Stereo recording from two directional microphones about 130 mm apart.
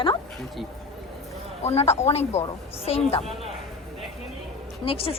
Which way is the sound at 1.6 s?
55° left (ahead or behind).